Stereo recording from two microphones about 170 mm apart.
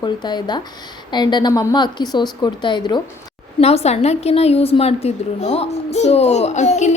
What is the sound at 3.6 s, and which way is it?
A woman's voice, 40° left (ahead or behind).